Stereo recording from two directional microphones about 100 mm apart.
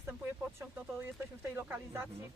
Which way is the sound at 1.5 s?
25° right (ahead or behind).